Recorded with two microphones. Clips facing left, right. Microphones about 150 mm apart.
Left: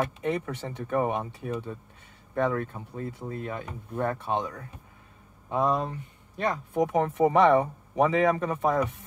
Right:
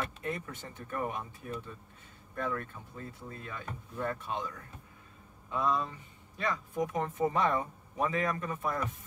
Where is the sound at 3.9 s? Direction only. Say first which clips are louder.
Left 7 dB; 70° left (ahead or behind).